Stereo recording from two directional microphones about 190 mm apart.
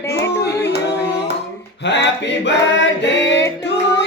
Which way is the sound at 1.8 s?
65° left (ahead or behind).